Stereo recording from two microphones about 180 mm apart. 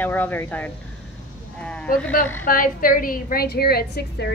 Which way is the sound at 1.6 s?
5° left (ahead or behind).